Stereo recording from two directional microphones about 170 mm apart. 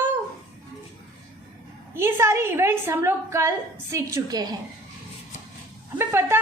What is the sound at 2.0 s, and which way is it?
A woman's voice, 15° right (ahead or behind).